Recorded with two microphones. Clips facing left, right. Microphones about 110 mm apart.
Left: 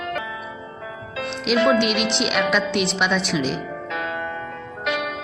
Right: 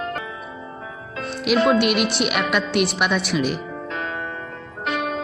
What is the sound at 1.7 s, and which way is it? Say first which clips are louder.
A woman's voice: right 1 dB; 5° right (ahead or behind).